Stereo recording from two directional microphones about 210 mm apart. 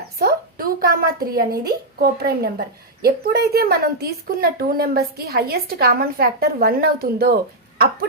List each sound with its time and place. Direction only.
0.2 s a woman's voice: 45° right (ahead or behind)